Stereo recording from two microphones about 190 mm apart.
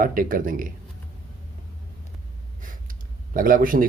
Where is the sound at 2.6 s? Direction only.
45° right (ahead or behind).